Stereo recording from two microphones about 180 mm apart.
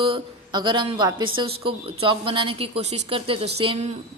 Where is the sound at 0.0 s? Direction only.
30° right (ahead or behind).